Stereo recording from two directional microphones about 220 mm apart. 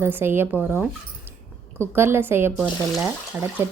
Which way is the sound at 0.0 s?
10° right (ahead or behind).